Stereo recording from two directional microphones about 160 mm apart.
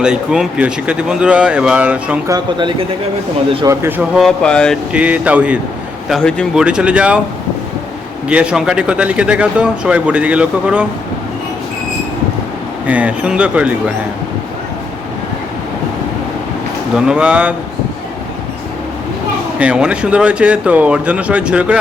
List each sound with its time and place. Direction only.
0.0 s speech: 5° right (ahead or behind)
2.2 s speech: 25° right (ahead or behind)
3.7 s speech: 15° right (ahead or behind)
4.1 s speech: centre (ahead or behind)
4.9 s speech: 10° right (ahead or behind)
6.1 s speech: 5° left (ahead or behind)
6.5 s speech: 5° right (ahead or behind)
8.3 s speech: 5° right (ahead or behind)
12.9 s speech: 10° right (ahead or behind)
16.9 s speech: 5° right (ahead or behind)
19.5 s speech: 5° right (ahead or behind)